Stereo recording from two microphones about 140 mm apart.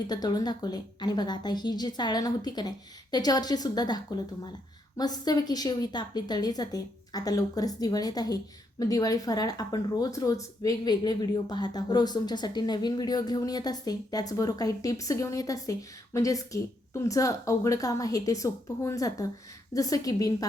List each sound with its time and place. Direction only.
0.1 s speech: 30° left (ahead or behind)